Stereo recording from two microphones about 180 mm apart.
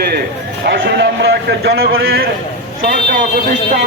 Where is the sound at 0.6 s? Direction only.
85° right.